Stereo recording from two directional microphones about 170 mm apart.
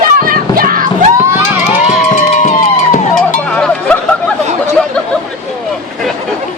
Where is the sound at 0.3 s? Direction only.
55° right (ahead or behind).